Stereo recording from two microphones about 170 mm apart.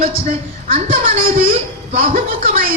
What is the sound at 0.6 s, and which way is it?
A woman's voice, 55° right (ahead or behind).